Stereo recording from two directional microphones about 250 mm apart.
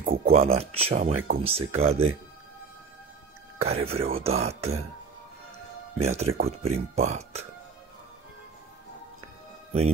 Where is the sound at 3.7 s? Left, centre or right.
Right.